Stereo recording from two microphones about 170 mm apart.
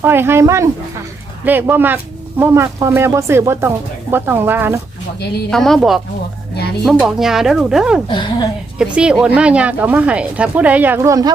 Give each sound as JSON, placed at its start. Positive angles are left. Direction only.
{"t": 0.0, "sound": "speech", "side_deg": -15}
{"t": 5.5, "sound": "speech", "side_deg": 0}
{"t": 8.0, "sound": "speech", "side_deg": 30}
{"t": 8.8, "sound": "speech", "side_deg": -5}